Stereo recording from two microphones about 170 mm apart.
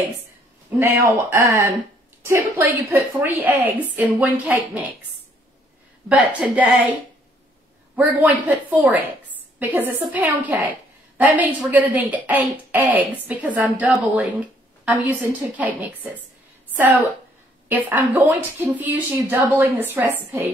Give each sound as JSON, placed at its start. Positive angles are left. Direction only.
{"t": 0.7, "sound": "speech", "side_deg": -15}
{"t": 6.0, "sound": "speech", "side_deg": -10}
{"t": 7.9, "sound": "a woman's voice", "side_deg": -10}